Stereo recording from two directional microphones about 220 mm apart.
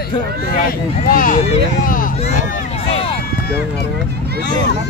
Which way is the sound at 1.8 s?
40° left (ahead or behind).